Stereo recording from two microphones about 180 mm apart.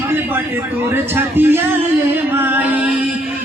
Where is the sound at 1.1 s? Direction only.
10° right (ahead or behind).